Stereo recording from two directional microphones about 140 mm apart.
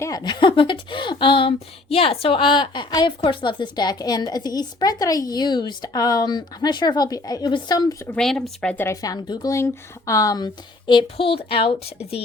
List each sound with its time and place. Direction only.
0.0 s a woman's voice: 25° left (ahead or behind)
8.0 s speech: 5° left (ahead or behind)
9.0 s a woman's voice: 30° left (ahead or behind); by 12.2 s 45° left (ahead or behind)